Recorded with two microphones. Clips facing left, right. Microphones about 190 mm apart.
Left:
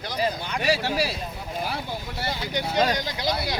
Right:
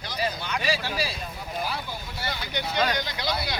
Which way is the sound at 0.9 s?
70° left (ahead or behind).